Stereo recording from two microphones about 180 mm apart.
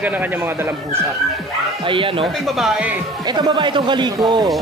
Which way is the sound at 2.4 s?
Centre (ahead or behind).